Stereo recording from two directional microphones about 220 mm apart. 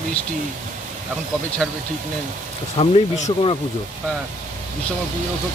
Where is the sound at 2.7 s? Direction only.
30° left (ahead or behind).